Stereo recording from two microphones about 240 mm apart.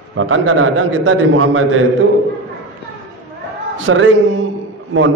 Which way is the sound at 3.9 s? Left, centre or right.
Right.